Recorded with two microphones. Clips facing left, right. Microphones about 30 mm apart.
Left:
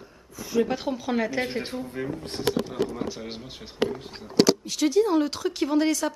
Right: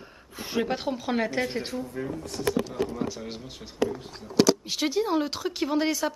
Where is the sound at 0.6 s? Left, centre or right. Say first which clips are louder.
Left 3 dB; centre.